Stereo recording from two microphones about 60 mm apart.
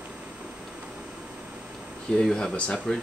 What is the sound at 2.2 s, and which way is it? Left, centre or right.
Speech, centre.